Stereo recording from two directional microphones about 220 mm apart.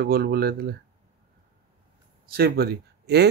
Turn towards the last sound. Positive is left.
turn(degrees=-50)  # may be behind; listen again after turning